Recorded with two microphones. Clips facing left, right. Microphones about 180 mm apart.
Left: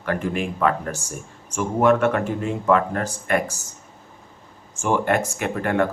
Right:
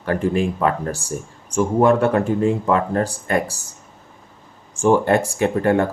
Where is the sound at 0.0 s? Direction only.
30° right (ahead or behind).